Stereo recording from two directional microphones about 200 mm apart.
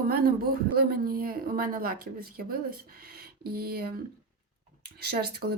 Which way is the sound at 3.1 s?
50° right (ahead or behind).